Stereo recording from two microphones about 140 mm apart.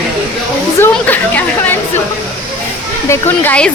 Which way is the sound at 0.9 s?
10° left (ahead or behind).